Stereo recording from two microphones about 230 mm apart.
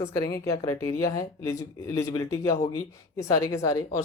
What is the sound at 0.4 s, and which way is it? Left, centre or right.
Speech, centre.